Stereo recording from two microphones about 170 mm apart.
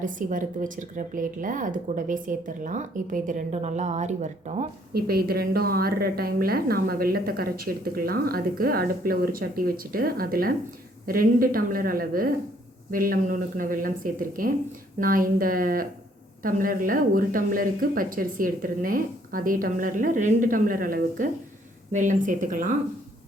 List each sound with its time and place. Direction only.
0.0 s speech: 50° right (ahead or behind)
4.9 s a woman's voice: 65° right (ahead or behind)